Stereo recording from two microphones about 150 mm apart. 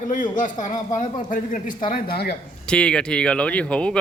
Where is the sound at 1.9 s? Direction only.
90° left.